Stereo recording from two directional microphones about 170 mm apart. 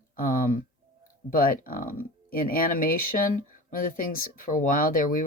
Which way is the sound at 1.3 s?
55° left (ahead or behind).